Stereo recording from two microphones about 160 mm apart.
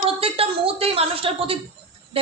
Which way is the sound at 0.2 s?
35° right (ahead or behind).